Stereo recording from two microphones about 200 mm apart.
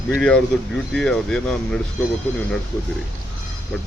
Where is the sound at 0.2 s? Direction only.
5° left (ahead or behind).